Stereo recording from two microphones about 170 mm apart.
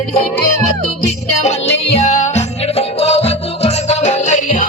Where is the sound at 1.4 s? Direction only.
40° left (ahead or behind).